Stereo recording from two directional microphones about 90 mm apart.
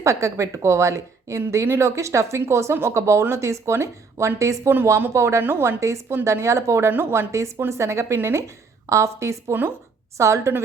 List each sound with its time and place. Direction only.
0.0 s a woman's voice: 35° right (ahead or behind)